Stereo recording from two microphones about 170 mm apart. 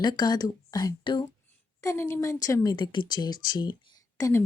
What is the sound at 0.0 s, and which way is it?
A woman's voice, 25° left (ahead or behind).